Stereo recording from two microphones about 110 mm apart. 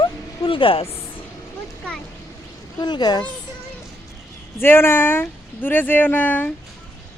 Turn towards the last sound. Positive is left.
turn(degrees=15)  # may be behind; listen again after turning